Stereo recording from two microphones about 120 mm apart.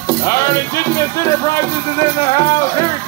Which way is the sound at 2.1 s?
45° left (ahead or behind).